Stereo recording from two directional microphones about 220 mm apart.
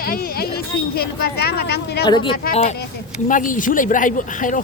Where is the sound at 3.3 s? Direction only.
35° left (ahead or behind).